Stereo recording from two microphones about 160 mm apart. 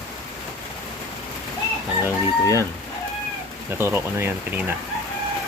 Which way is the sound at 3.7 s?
15° right (ahead or behind).